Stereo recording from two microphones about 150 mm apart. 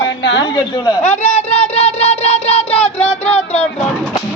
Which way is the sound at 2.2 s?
45° left (ahead or behind).